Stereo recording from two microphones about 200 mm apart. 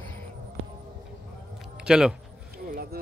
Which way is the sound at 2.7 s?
50° right (ahead or behind).